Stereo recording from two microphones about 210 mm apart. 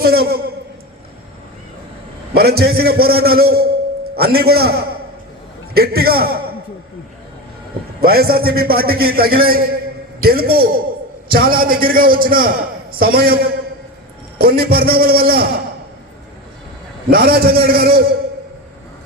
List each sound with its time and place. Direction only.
0.0 s a man's voice: 45° right (ahead or behind)
2.3 s a man's voice: 50° right (ahead or behind)
8.0 s a man's voice: 45° right (ahead or behind)
17.1 s a man's voice: 45° right (ahead or behind)